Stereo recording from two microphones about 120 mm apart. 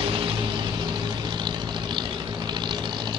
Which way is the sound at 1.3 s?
40° right (ahead or behind).